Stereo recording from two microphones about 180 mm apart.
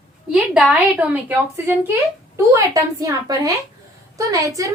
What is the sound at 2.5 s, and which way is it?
A woman's voice, 20° right (ahead or behind).